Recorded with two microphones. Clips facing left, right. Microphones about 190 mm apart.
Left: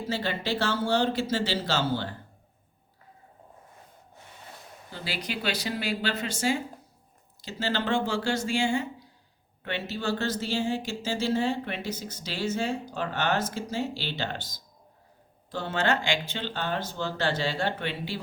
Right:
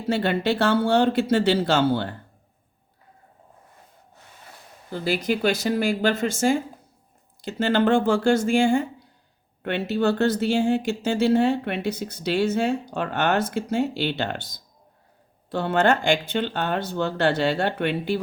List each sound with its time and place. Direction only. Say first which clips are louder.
0.1 s speech: right 8 dB; 60° right (ahead or behind)
4.9 s speech: right 11 dB; 50° right (ahead or behind)